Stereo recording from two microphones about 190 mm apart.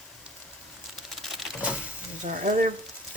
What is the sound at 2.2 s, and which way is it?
Speech, 45° right (ahead or behind).